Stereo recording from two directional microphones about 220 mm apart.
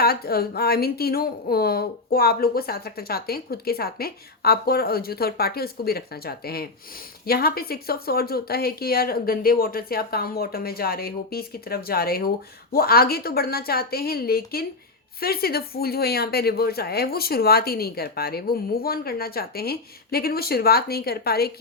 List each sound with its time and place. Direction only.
0.0 s a woman's voice: 45° left (ahead or behind)